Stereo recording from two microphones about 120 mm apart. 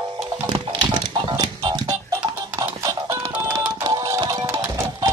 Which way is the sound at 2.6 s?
25° right (ahead or behind).